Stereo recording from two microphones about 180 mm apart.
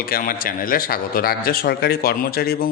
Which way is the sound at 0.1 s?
55° left (ahead or behind).